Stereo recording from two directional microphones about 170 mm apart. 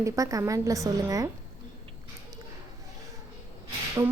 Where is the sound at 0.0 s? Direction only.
20° right (ahead or behind).